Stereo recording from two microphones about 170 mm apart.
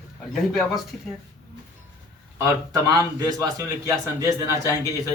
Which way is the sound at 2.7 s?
20° right (ahead or behind).